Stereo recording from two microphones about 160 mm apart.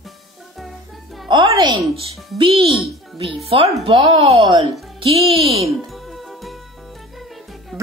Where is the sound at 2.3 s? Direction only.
30° right (ahead or behind).